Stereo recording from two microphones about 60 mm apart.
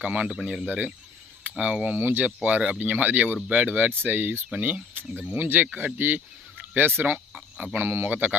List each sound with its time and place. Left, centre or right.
0.0 s speech: right
0.6 s speech: right
1.9 s speech: right
7.3 s insect: centre
7.8 s speech: right